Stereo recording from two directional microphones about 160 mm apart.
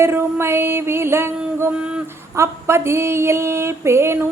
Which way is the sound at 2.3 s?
15° right (ahead or behind).